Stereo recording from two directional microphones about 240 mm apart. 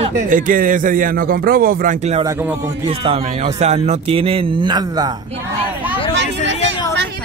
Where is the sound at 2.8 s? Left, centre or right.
Right.